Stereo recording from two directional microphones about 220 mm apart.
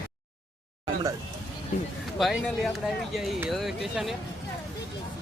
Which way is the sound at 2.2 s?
Centre (ahead or behind).